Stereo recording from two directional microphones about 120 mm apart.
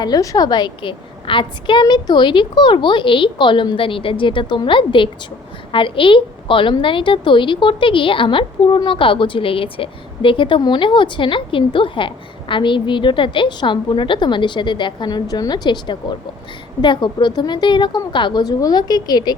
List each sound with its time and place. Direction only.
0.0 s a woman's voice: 30° left (ahead or behind)